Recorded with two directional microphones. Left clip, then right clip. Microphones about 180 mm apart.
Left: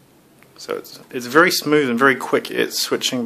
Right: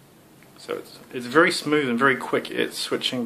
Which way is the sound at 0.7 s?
45° left (ahead or behind).